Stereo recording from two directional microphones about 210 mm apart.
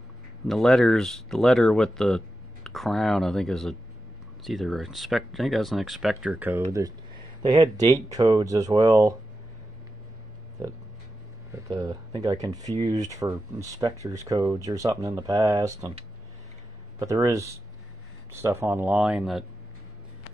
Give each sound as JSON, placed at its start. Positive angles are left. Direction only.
{"t": 0.5, "sound": "speech", "side_deg": 0}
{"t": 6.7, "sound": "speech", "side_deg": -20}
{"t": 11.5, "sound": "speech", "side_deg": -15}
{"t": 17.0, "sound": "speech", "side_deg": -15}